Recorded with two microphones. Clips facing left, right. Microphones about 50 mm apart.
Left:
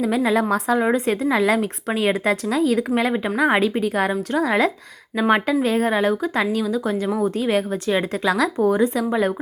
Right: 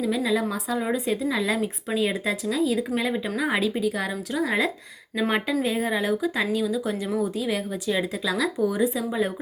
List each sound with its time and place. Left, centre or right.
0.0 s speech: left
3.1 s speech: left
3.8 s speech: left
5.1 s speech: left
5.6 s speech: left
8.3 s speech: left
8.6 s speech: left